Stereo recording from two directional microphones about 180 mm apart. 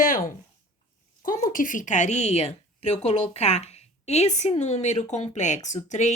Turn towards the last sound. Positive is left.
turn(degrees=40)  # may be behind; listen again after turning